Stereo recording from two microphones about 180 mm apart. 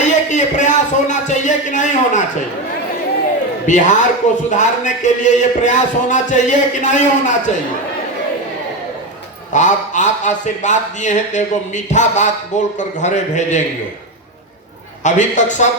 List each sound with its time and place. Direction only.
0.0 s a sound: 40° left (ahead or behind)
3.7 s a man's voice: 45° left (ahead or behind)
9.5 s a man's voice: 45° left (ahead or behind)
15.0 s a man's voice: 40° left (ahead or behind)